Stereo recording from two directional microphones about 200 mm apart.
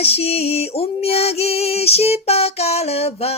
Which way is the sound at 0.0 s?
30° left (ahead or behind).